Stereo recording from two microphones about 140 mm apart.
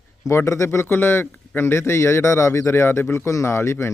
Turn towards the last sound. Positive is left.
turn(degrees=20)  # may be behind; listen again after turning